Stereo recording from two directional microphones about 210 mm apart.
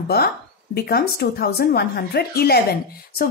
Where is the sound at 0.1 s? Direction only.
50° left (ahead or behind).